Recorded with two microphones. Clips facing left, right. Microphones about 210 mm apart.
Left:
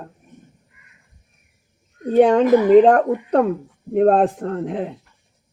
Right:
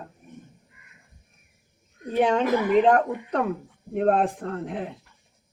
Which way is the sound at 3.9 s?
35° left (ahead or behind).